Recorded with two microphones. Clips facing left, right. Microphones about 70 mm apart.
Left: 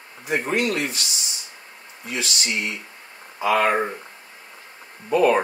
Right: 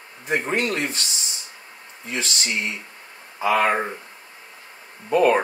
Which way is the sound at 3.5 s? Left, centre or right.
Centre.